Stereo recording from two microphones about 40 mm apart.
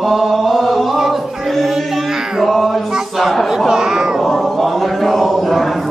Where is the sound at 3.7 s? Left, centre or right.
Centre.